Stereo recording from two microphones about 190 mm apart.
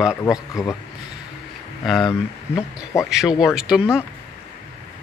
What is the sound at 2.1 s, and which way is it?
Speech, 15° left (ahead or behind).